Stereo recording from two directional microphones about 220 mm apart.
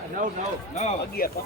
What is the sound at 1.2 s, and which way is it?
Speech, 40° left (ahead or behind).